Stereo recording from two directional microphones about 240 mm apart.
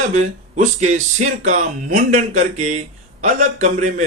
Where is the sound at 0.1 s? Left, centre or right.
Right.